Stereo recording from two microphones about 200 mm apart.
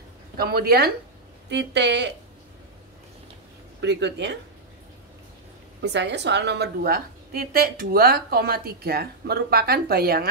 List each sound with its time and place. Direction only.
0.4 s a woman's voice: 50° right (ahead or behind)
3.8 s speech: 60° right (ahead or behind)
5.8 s a woman's voice: 60° right (ahead or behind)